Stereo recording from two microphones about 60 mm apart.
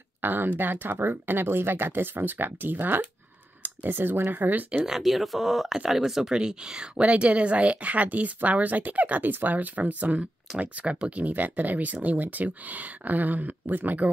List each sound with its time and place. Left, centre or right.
0.2 s speech: right
4.8 s speech: centre; by 14.0 s right